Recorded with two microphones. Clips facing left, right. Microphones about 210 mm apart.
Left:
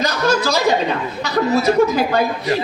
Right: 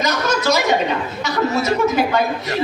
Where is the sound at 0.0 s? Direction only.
35° left (ahead or behind).